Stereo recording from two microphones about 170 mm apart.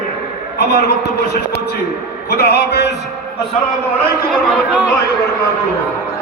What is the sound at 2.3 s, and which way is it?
Speech, 70° left (ahead or behind).